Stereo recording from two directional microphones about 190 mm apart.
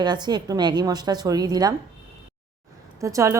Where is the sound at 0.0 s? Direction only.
20° right (ahead or behind).